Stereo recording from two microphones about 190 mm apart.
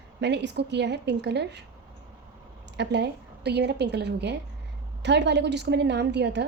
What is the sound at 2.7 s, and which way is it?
A woman's voice, 65° right (ahead or behind).